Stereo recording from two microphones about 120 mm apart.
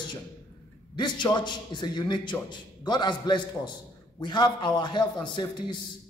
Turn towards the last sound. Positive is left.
turn(degrees=40)  # may be behind; listen again after turning